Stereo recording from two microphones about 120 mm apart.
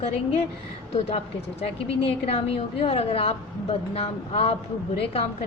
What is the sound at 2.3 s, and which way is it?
A woman's voice, 55° left (ahead or behind).